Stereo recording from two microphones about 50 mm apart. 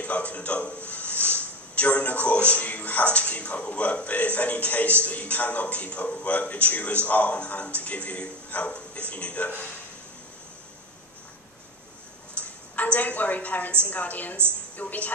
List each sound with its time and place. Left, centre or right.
0.0 s a man's voice: left
12.4 s a woman's voice: left